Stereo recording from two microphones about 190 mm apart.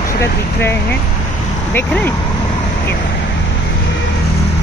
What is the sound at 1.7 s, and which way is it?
Speech, 10° left (ahead or behind).